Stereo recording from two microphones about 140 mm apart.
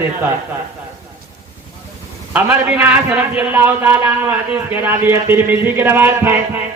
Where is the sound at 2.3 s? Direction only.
10° right (ahead or behind).